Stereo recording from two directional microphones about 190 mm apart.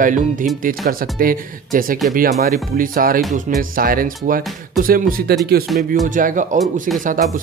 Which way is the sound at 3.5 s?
50° right (ahead or behind).